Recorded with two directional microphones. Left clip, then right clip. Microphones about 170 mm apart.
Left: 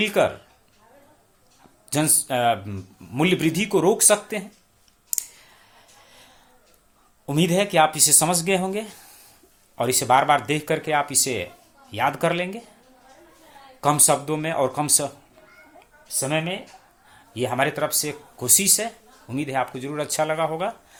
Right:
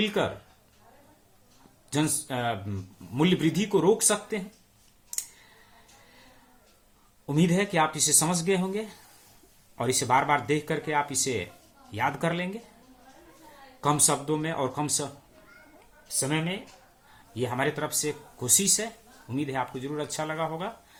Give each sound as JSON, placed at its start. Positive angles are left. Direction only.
{"t": 0.0, "sound": "speech", "side_deg": 30}
{"t": 1.9, "sound": "speech", "side_deg": 30}
{"t": 5.1, "sound": "clicking", "side_deg": 35}
{"t": 7.3, "sound": "speech", "side_deg": 30}
{"t": 13.8, "sound": "speech", "side_deg": 30}